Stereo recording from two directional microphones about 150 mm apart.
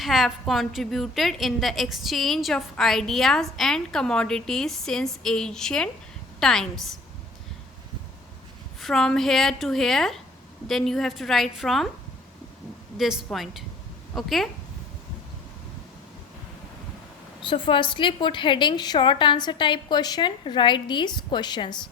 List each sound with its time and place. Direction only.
0.0 s a woman's voice: centre (ahead or behind)
8.8 s a woman's voice: centre (ahead or behind)
13.0 s a woman's voice: centre (ahead or behind)
17.4 s a woman's voice: 35° left (ahead or behind)